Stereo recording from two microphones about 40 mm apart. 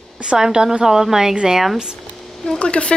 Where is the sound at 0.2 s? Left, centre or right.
Right; by 1.8 s centre.